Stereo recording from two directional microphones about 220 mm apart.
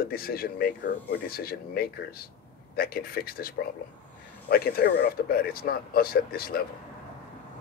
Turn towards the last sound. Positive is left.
turn(degrees=45)  # may be behind; listen again after turning